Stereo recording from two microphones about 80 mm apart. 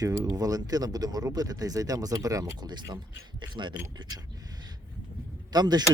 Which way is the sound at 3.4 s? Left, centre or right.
Right.